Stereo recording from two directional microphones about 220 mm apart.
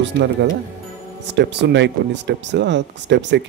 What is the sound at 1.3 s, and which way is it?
Speech, 50° right (ahead or behind).